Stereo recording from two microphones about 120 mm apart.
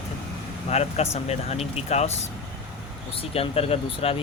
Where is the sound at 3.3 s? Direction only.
55° left (ahead or behind).